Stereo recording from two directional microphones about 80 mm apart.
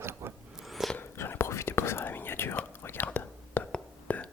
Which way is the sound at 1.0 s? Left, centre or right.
Left.